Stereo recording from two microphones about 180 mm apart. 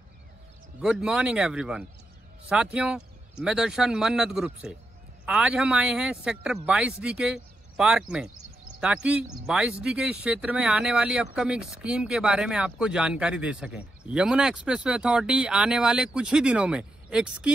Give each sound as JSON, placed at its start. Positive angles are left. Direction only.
{"t": 0.7, "sound": "speech", "side_deg": -5}